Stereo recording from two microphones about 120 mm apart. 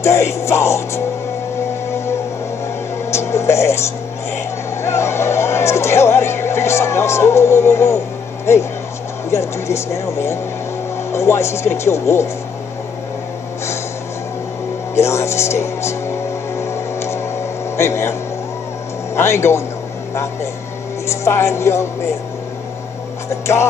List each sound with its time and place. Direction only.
0.0 s speech: 25° left (ahead or behind)
3.1 s music: 20° left (ahead or behind)
4.8 s speech: 20° left (ahead or behind)
9.3 s speech: 25° left (ahead or behind)
15.0 s speech: 25° left (ahead or behind)
16.5 s a sound: 20° left (ahead or behind)
17.7 s speech: 20° left (ahead or behind)
19.1 s speech: 20° left (ahead or behind)
21.1 s speech: 20° left (ahead or behind)
23.4 s music: 20° left (ahead or behind)